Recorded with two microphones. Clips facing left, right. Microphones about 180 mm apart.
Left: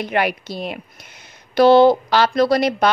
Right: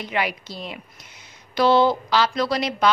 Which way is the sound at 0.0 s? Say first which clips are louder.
Left 6 dB; 60° left (ahead or behind).